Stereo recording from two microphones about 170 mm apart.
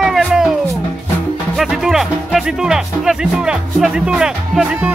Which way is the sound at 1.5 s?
5° right (ahead or behind).